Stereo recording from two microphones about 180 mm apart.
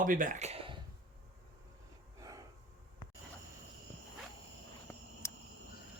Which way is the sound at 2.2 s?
20° right (ahead or behind).